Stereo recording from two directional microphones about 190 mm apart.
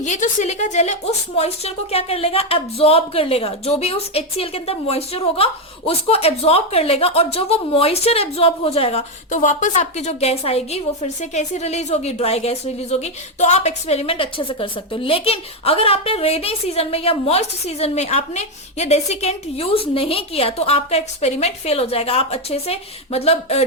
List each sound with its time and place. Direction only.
0.0 s a woman's voice: 40° left (ahead or behind)